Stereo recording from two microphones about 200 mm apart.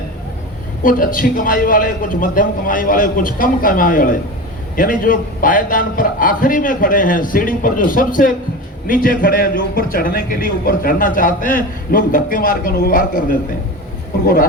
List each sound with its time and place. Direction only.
0.8 s a man's voice: 45° left (ahead or behind)